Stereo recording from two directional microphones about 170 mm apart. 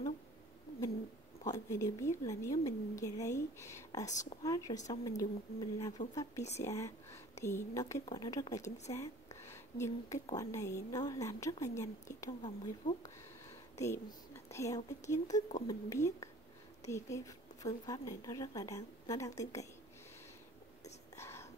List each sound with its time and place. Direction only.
1.4 s a woman's voice: 20° left (ahead or behind)
8.6 s a woman's voice: 40° left (ahead or behind)
8.9 s a sound: 15° left (ahead or behind)
10.3 s a woman's voice: 20° left (ahead or behind)
12.3 s a woman's voice: 30° left (ahead or behind)
13.5 s speech: 15° left (ahead or behind)
15.3 s speech: 45° left (ahead or behind)
15.6 s a woman's voice: 20° left (ahead or behind)
21.2 s whispering: 15° left (ahead or behind)